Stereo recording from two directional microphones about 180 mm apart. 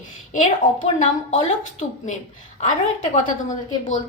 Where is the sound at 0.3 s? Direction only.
45° left (ahead or behind).